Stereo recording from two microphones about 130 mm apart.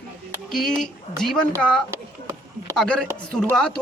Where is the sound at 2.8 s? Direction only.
5° left (ahead or behind).